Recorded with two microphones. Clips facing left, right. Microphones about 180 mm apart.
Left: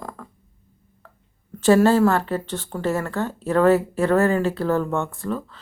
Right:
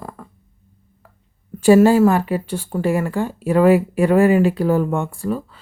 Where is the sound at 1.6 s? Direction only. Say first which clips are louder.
Right 4 dB; 10° right (ahead or behind).